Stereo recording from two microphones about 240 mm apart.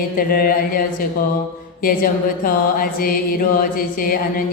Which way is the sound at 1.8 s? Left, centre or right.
Left.